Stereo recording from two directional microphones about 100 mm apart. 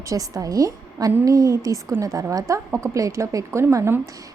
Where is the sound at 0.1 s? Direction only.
35° right (ahead or behind).